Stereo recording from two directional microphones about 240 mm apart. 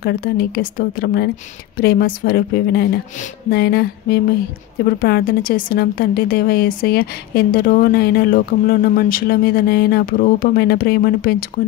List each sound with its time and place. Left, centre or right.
0.0 s a woman's voice: left